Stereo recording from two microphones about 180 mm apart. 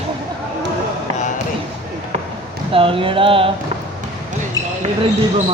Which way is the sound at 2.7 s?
30° right (ahead or behind).